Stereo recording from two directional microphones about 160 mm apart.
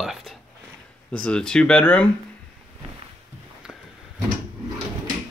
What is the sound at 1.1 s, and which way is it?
Speech, 5° left (ahead or behind).